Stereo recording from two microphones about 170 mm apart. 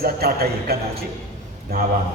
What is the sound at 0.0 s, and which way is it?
Speech, 65° right (ahead or behind).